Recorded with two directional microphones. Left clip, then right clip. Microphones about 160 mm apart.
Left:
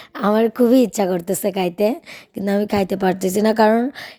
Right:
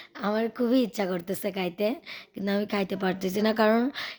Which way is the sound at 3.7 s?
25° left (ahead or behind).